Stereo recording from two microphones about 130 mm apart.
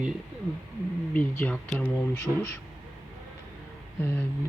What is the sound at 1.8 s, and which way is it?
Speech, 20° left (ahead or behind).